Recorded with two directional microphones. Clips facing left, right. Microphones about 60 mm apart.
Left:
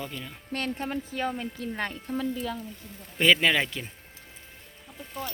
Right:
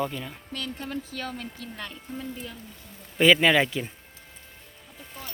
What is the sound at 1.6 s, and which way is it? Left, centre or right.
Speech, left.